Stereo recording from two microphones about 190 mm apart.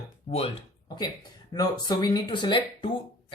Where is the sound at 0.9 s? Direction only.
20° left (ahead or behind).